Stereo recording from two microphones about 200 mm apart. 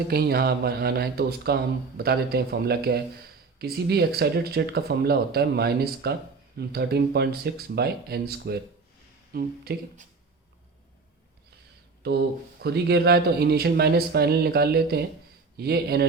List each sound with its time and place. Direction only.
0.1 s speech: 50° right (ahead or behind)
12.0 s speech: 55° right (ahead or behind)